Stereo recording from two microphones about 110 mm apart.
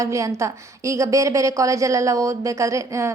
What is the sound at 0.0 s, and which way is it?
A woman's voice, 30° right (ahead or behind).